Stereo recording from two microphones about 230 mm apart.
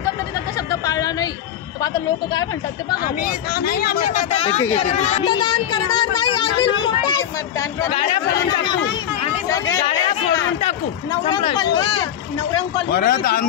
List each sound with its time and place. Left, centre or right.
0.7 s a sound: centre
3.6 s speech: left; by 7.9 s centre
7.9 s speech: left
9.8 s a sound: left
10.3 s speech: left
12.9 s speech: left